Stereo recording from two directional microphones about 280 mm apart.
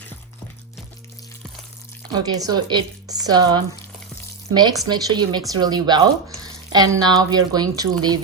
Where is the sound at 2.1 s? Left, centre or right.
Centre.